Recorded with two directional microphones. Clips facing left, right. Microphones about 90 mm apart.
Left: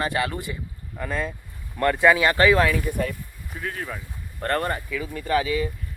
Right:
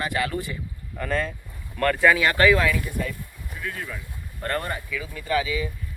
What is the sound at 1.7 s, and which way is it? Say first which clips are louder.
Speech: left 1 dB; 20° left (ahead or behind).